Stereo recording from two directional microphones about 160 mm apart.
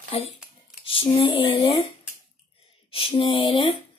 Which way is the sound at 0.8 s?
35° left (ahead or behind).